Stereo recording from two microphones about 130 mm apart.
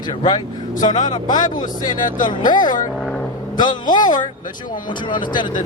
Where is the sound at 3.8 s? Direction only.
80° left.